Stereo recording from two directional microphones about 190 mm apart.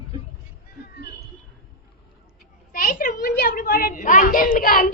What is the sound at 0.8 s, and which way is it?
Speech, 60° left (ahead or behind).